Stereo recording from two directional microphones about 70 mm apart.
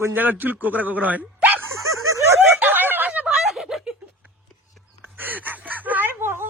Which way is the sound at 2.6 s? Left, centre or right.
Right.